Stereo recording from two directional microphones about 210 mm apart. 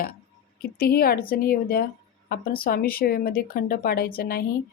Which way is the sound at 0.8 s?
45° left (ahead or behind).